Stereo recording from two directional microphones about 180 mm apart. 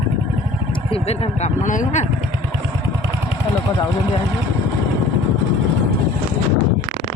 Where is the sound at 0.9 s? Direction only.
35° left (ahead or behind).